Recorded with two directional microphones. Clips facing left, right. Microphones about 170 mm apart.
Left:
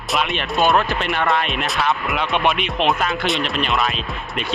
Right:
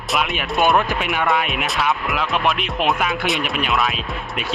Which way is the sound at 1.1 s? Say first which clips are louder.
Even; 5° right (ahead or behind).